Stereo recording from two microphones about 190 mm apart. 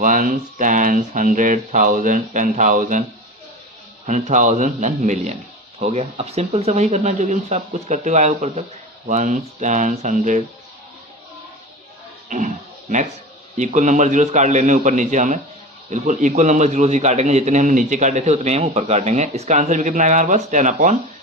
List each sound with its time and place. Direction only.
0.0 s speech: 45° right (ahead or behind)
4.0 s a man's voice: 40° right (ahead or behind)
13.6 s a man's voice: 40° right (ahead or behind)